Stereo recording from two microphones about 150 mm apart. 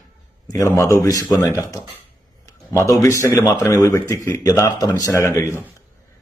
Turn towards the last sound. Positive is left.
turn(degrees=20)  # may be behind; listen again after turning